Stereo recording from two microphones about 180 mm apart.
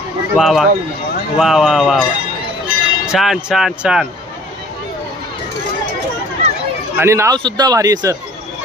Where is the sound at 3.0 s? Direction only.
Centre (ahead or behind).